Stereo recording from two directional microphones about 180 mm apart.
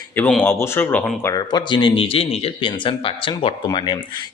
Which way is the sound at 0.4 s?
15° left (ahead or behind).